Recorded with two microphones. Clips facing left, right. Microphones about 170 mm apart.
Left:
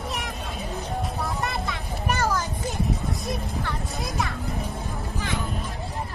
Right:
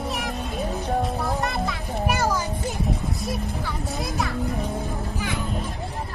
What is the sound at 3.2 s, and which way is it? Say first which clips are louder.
A man's voice: right 1 dB; centre (ahead or behind).